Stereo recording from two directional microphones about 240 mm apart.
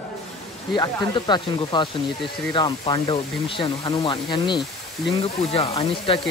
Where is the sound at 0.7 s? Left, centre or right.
Centre.